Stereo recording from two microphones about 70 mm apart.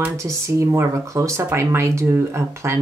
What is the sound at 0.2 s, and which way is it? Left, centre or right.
Speech, right.